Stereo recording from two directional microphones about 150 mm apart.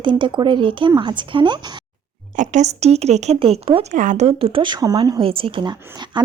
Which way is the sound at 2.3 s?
55° right (ahead or behind).